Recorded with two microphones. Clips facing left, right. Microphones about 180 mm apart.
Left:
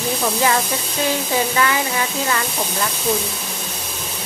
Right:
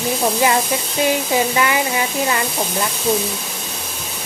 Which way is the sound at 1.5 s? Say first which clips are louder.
Right 1 dB; 15° right (ahead or behind).